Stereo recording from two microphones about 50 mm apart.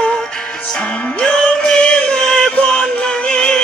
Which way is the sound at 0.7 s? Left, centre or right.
Centre.